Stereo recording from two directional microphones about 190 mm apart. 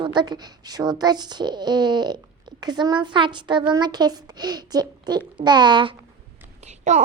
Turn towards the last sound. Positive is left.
turn(degrees=-35)  # may be behind; listen again after turning